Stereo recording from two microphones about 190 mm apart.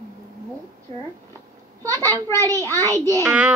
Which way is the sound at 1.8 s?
15° right (ahead or behind).